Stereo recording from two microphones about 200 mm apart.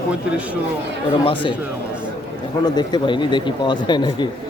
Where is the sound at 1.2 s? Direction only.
25° left (ahead or behind).